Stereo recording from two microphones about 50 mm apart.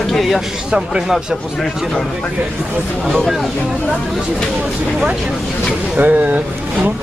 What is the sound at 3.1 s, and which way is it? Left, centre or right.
Speech, centre.